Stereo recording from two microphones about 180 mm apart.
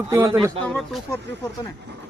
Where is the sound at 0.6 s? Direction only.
Centre (ahead or behind).